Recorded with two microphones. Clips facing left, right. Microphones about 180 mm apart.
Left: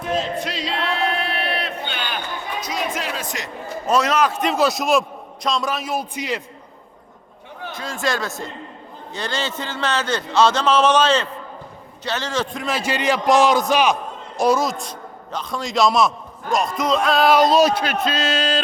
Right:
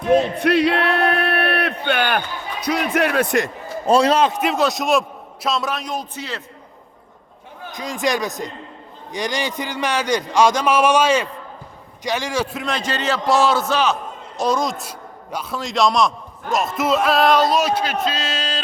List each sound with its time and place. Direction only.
0.1 s a sound: 60° right (ahead or behind)
1.8 s basketball bounce: 60° right (ahead or behind)
3.8 s a man's voice: 30° right (ahead or behind)
4.4 s a man's voice: centre (ahead or behind)
7.7 s a man's voice: 15° right (ahead or behind)
17.5 s a man's voice: 35° left (ahead or behind)
17.7 s speech: 55° left (ahead or behind)